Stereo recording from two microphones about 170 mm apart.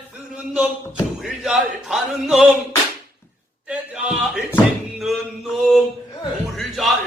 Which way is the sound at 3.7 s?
5° right (ahead or behind).